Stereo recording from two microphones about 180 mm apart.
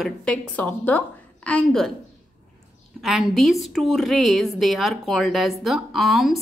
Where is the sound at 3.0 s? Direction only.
Centre (ahead or behind).